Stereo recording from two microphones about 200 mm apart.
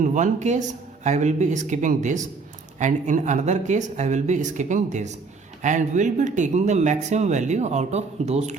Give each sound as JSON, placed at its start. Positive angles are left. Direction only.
{"t": 0.0, "sound": "speech", "side_deg": -40}